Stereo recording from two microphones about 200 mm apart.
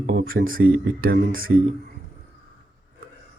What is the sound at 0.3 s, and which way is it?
Speech, 80° right.